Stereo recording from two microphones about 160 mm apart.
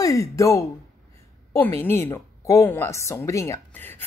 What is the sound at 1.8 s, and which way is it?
A woman's voice, 15° left (ahead or behind).